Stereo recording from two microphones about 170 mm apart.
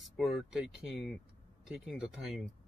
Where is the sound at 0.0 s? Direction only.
Centre (ahead or behind).